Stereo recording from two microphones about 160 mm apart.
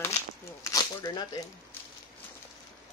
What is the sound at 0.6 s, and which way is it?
Speech, 25° left (ahead or behind).